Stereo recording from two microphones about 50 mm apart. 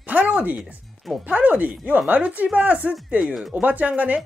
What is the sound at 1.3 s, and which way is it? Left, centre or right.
Speech, right.